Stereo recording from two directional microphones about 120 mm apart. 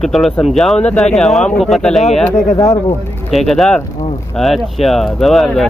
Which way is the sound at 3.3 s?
Centre (ahead or behind).